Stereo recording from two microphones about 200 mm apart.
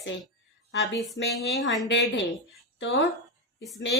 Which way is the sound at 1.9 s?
65° left (ahead or behind).